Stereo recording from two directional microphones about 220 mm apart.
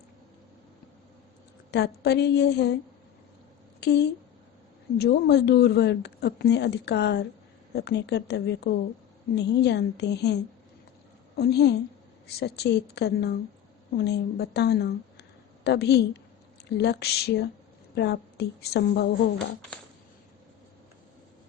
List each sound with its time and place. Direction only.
1.7 s speech: 50° left (ahead or behind)
3.8 s speech: 50° left (ahead or behind)
11.3 s speech: 50° left (ahead or behind)